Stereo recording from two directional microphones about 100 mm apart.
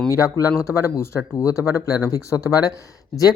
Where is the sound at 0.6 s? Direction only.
30° left (ahead or behind).